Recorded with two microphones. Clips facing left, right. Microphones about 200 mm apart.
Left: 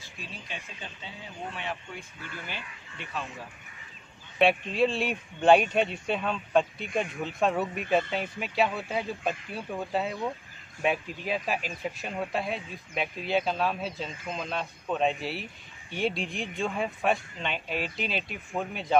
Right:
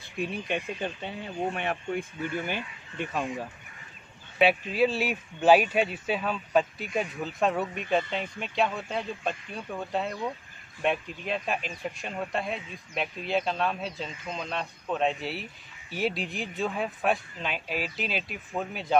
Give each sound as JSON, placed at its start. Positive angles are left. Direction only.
{"t": 0.0, "sound": "speech", "side_deg": -60}
{"t": 4.4, "sound": "a man's voice", "side_deg": -5}